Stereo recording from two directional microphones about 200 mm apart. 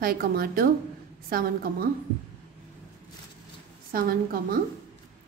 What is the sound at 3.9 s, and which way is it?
Speech, 45° right (ahead or behind).